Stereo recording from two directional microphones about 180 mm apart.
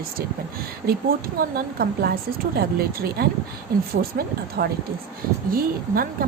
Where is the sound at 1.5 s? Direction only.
55° right (ahead or behind).